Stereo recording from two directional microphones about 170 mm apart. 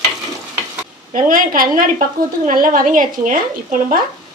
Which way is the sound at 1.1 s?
55° right (ahead or behind).